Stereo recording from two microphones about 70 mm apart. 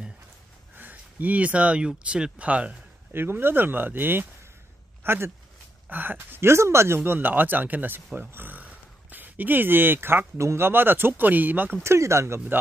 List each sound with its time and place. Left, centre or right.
0.7 s speech: right
3.1 s speech: right
7.0 s speech: right
11.8 s speech: right